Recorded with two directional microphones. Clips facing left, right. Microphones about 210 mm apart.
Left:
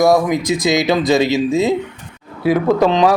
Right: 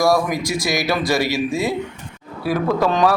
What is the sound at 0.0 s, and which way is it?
A man's voice, 20° left (ahead or behind).